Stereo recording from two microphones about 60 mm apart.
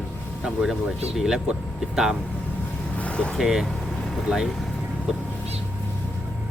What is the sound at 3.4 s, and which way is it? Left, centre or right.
Speech, centre.